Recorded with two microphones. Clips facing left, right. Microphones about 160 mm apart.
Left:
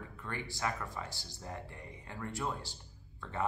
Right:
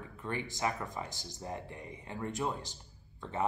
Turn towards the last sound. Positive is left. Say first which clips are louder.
# right 2 dB
turn(degrees=-20)  # may be behind; listen again after turning